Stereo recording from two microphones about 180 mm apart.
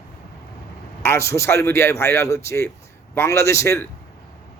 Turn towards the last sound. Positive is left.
turn(degrees=15)  # may be behind; listen again after turning